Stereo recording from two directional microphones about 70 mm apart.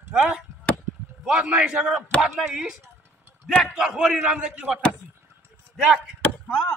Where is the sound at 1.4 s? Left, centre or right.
Centre.